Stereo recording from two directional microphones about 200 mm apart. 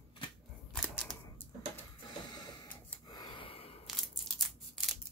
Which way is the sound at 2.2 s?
20° left (ahead or behind).